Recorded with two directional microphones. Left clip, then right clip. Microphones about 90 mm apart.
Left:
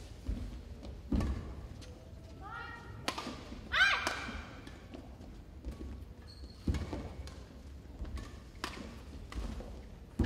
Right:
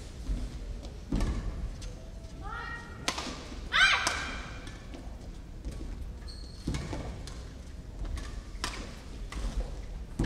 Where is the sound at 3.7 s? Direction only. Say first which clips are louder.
Right 5 dB; 15° right (ahead or behind).